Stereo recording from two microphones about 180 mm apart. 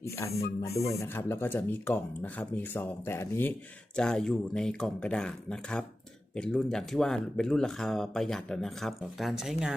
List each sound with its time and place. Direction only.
0.0 s speech: 15° left (ahead or behind); by 9.7 s centre (ahead or behind)